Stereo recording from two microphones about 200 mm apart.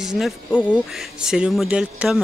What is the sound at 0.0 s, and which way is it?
Speech, centre (ahead or behind).